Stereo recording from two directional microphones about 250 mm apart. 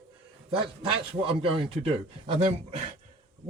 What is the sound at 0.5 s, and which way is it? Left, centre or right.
Speech, right.